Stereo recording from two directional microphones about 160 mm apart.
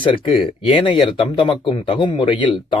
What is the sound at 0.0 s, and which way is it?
Speech, 30° left (ahead or behind).